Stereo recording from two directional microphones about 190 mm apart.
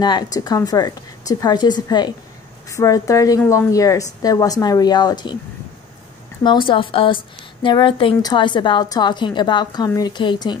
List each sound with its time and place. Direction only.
0.0 s a woman's voice: 20° left (ahead or behind)
6.4 s a woman's voice: 25° left (ahead or behind)